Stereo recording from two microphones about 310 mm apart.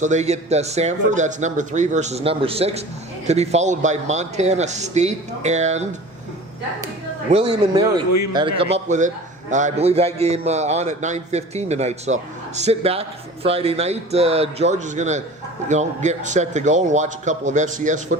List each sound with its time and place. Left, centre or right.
0.0 s a man's voice: right
7.3 s a man's voice: centre